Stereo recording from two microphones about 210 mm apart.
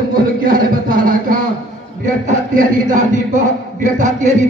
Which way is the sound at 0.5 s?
40° right (ahead or behind).